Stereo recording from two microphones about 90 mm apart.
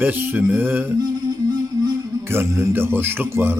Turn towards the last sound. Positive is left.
turn(degrees=-25)  # may be behind; listen again after turning